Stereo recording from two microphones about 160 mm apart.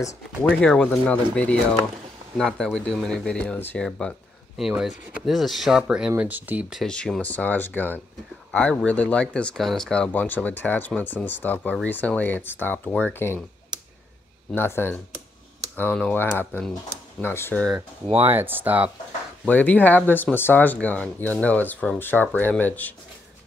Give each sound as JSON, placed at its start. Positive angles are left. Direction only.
{"t": 0.0, "sound": "speech", "side_deg": 10}
{"t": 14.5, "sound": "speech", "side_deg": 15}
{"t": 18.2, "sound": "speech", "side_deg": -15}
{"t": 19.4, "sound": "speech", "side_deg": 10}